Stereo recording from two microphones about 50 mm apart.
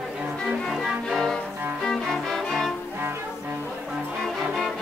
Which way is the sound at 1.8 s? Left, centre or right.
Centre.